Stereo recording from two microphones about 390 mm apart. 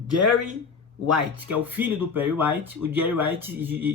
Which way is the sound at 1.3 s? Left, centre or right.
Centre.